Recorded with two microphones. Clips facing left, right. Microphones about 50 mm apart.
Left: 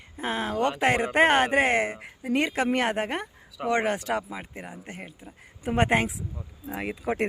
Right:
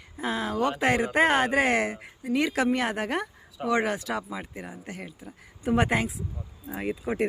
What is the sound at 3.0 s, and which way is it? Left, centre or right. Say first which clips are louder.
Speech: right 2 dB; left.